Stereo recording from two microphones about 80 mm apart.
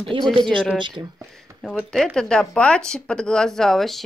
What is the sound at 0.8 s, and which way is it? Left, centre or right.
Speech, right.